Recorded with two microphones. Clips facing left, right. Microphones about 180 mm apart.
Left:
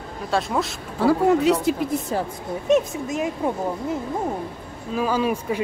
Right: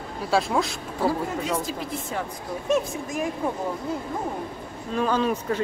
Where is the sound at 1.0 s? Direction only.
70° left (ahead or behind).